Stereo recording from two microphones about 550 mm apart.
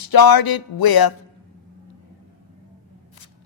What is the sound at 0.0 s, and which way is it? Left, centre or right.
A man's voice, left.